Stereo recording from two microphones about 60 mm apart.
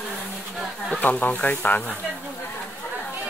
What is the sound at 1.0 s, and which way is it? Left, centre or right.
Speech, left.